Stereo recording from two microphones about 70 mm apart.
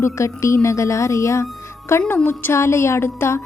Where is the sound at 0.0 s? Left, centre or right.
Left.